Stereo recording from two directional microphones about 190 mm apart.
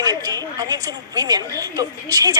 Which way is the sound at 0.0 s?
20° right (ahead or behind).